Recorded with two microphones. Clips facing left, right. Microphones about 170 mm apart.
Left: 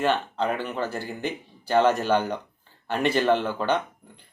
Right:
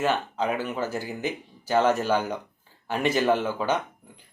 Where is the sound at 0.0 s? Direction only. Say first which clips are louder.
Left 1 dB; 5° right (ahead or behind).